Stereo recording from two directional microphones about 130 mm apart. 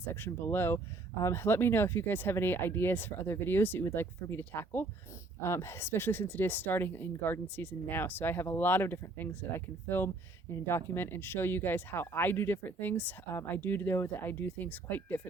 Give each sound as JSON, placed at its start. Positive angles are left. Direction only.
{"t": 0.0, "sound": "speech", "side_deg": 15}